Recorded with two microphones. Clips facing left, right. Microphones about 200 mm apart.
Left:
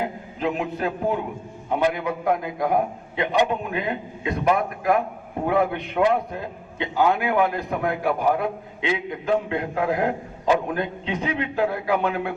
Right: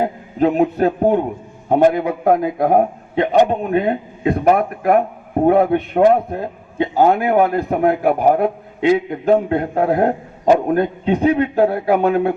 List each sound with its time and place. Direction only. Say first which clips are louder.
0.0 s a man's voice: right 9 dB; 50° right (ahead or behind)
7.8 s a man's voice: right 8 dB; 35° right (ahead or behind)